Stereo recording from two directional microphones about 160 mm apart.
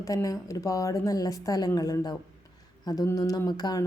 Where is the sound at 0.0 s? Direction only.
20° left (ahead or behind).